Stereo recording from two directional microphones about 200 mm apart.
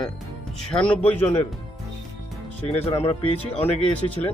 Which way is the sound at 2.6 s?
30° left (ahead or behind).